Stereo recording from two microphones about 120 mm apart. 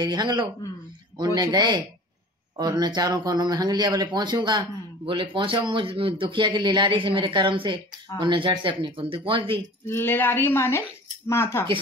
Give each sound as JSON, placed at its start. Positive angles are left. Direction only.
{"t": 0.0, "sound": "speech", "side_deg": -40}
{"t": 9.8, "sound": "speech", "side_deg": 20}